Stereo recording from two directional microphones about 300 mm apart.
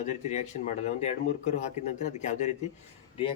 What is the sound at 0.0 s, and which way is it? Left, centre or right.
A man's voice, left.